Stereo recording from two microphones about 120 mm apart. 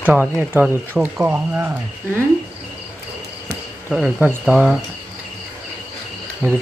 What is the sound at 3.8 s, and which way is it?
Speech, 10° right (ahead or behind).